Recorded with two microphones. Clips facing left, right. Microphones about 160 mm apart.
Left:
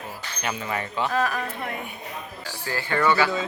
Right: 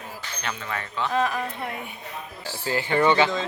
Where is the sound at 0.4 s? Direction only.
15° left (ahead or behind).